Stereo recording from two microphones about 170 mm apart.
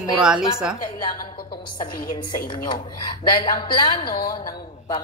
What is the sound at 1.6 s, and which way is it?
A woman's voice, 25° left (ahead or behind).